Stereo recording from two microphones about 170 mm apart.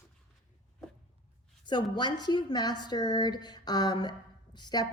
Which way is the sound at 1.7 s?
25° left (ahead or behind).